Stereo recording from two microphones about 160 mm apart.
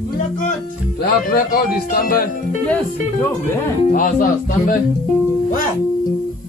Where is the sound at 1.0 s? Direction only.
65° left (ahead or behind).